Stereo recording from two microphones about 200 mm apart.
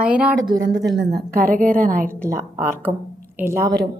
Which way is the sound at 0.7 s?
65° right (ahead or behind).